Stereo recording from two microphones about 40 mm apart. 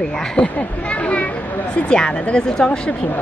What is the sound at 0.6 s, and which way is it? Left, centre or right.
Speech, left.